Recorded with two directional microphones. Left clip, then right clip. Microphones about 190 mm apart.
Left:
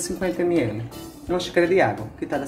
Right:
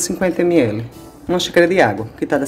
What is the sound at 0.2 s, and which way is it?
Speech, 45° right (ahead or behind).